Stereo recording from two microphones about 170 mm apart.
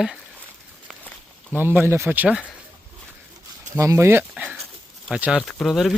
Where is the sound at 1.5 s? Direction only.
15° right (ahead or behind).